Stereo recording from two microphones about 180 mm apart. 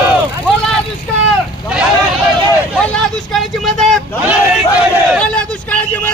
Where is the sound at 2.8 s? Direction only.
5° left (ahead or behind).